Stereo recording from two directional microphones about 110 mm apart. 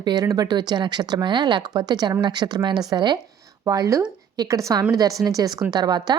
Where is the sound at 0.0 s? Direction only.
35° right (ahead or behind).